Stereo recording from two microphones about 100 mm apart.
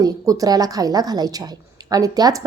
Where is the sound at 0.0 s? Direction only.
35° right (ahead or behind).